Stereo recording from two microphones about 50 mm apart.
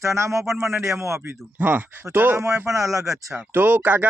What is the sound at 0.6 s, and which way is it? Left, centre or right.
Speech, right.